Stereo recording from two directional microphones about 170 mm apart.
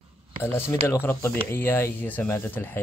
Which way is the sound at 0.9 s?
15° left (ahead or behind).